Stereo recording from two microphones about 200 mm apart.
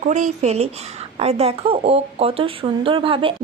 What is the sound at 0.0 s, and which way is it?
Speech, 35° right (ahead or behind).